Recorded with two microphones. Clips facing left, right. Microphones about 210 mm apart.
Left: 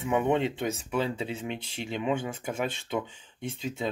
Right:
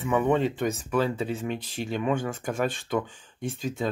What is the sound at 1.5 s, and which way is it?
Speech, 25° left (ahead or behind).